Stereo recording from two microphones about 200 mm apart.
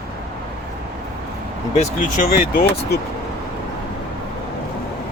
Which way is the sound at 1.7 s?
35° left (ahead or behind).